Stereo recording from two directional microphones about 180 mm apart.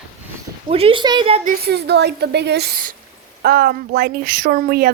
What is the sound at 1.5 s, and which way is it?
Speech, 65° right (ahead or behind).